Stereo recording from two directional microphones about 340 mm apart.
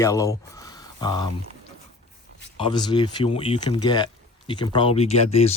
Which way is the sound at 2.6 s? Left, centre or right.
Centre.